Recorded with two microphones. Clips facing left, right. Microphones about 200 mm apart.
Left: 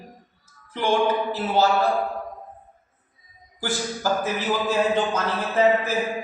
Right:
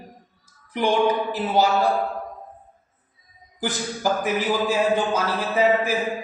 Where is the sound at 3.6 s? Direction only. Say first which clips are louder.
Right 1 dB; 15° right (ahead or behind).